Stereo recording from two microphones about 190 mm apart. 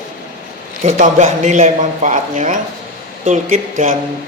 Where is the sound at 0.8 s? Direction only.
40° right (ahead or behind).